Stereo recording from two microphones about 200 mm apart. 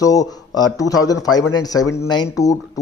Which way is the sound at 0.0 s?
15° left (ahead or behind).